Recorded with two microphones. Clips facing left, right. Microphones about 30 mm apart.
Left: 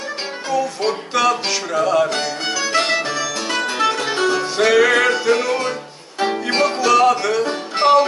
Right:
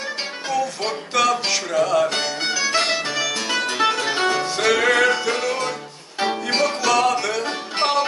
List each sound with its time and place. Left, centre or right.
0.5 s music: centre
2.2 s music: centre
4.6 s music: centre
6.8 s music: centre